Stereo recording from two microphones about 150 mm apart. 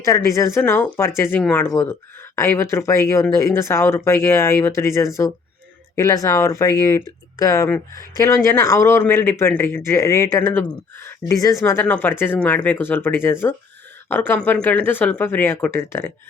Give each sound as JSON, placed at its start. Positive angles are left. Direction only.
{"t": 0.0, "sound": "speech", "side_deg": 20}